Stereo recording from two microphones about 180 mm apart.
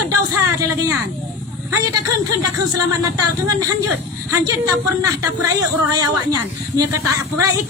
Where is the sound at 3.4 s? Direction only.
20° right (ahead or behind).